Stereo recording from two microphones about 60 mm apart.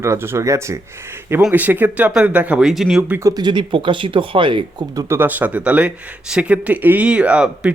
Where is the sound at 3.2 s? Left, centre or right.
Right.